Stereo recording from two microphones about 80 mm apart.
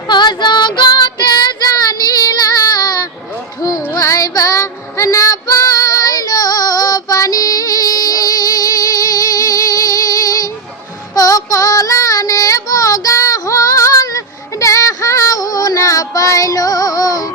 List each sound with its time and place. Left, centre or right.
0.1 s child singing: left
3.6 s child singing: left
3.9 s female singing: left
11.1 s child singing: left